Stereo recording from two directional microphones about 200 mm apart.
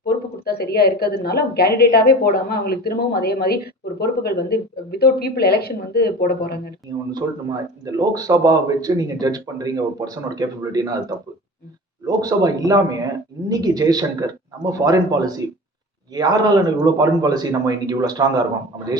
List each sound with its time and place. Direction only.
0.0 s a woman's voice: 50° left (ahead or behind)
6.8 s speech: 20° right (ahead or behind)
12.0 s speech: 20° right (ahead or behind)